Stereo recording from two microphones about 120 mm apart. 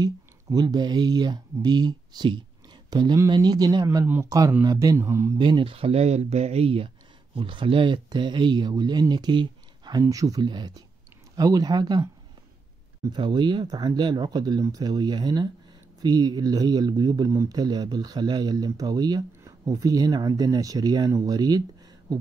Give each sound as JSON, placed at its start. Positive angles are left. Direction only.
{"t": 0.0, "sound": "speech", "side_deg": -35}
{"t": 4.0, "sound": "speech", "side_deg": -20}
{"t": 4.3, "sound": "speech", "side_deg": -30}
{"t": 5.4, "sound": "speech", "side_deg": -40}
{"t": 13.1, "sound": "speech", "side_deg": -40}